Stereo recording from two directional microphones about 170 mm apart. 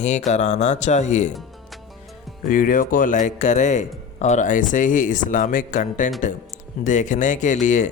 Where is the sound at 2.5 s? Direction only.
55° left (ahead or behind).